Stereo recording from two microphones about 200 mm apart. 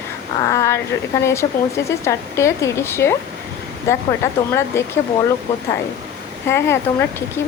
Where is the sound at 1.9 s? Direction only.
15° left (ahead or behind).